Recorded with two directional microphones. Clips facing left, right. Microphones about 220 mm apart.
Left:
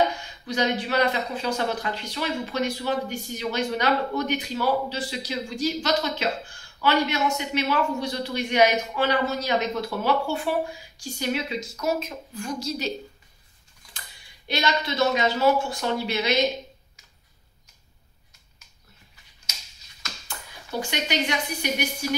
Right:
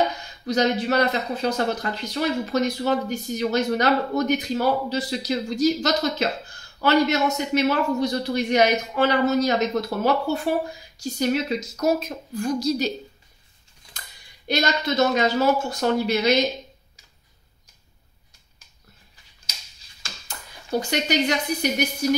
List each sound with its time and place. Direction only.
0.5 s speech: 45° right (ahead or behind)
14.5 s speech: 40° right (ahead or behind)
20.0 s a sound: 30° right (ahead or behind)
20.9 s speech: 40° right (ahead or behind)